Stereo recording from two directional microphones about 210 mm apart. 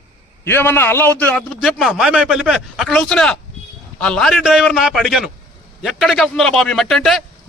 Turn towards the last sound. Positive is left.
turn(degrees=0)  # may be behind; listen again after turning